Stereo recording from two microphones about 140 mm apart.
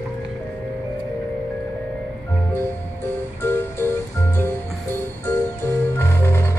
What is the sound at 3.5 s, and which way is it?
Music, 15° left (ahead or behind).